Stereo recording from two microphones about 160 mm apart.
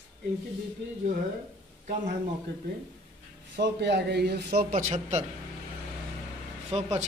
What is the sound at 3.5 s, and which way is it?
A man's voice, 90° right.